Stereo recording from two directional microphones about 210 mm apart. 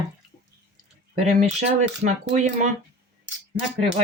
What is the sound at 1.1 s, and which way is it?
Speech, 35° right (ahead or behind).